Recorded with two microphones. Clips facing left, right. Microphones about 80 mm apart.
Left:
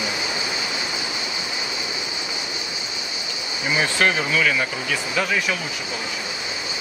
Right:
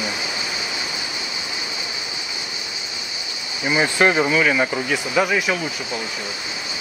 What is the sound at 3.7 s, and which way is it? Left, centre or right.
Speech, centre.